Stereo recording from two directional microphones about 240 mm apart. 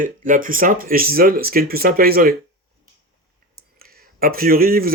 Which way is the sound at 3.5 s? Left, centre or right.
Right.